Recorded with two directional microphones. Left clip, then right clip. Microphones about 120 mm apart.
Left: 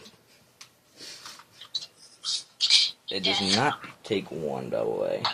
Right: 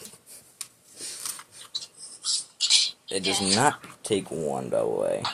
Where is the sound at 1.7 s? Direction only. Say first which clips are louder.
Left 1 dB; 35° left (ahead or behind).